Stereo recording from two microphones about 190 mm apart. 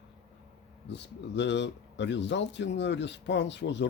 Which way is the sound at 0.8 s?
65° left (ahead or behind).